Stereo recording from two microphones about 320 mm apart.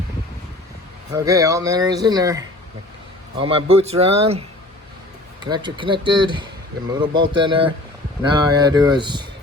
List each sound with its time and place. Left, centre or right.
1.1 s speech: centre
3.4 s speech: centre